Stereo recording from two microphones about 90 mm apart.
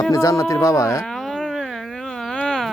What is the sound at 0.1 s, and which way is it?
Speech, 35° left (ahead or behind).